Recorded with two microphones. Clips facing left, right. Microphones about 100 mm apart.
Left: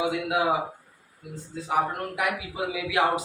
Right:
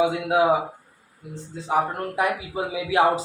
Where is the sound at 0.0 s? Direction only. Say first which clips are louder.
Right 5 dB; 30° right (ahead or behind).